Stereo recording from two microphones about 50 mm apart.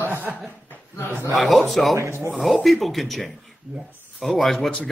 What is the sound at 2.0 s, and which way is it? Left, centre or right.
Speech, right.